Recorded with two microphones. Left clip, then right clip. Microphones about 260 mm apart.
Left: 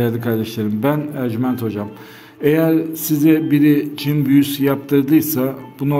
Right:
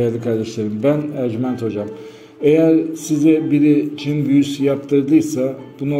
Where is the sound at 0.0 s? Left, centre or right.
Left.